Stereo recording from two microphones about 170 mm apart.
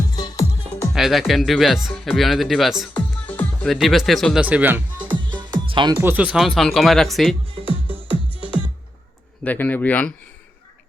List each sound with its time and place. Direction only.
0.1 s music: 25° left (ahead or behind)
0.9 s speech: centre (ahead or behind)
2.9 s music: 10° left (ahead or behind)
4.4 s speech: 10° right (ahead or behind)
5.4 s music: 30° right (ahead or behind)
6.0 s speech: 10° right (ahead or behind)
9.4 s speech: 10° left (ahead or behind)